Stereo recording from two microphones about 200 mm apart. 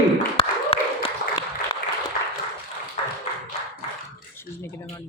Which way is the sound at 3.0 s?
30° left (ahead or behind).